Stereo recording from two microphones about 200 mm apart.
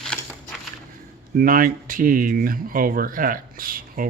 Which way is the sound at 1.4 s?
45° right (ahead or behind).